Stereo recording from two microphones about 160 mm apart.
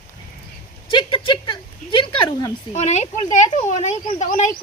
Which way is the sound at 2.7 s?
45° left (ahead or behind).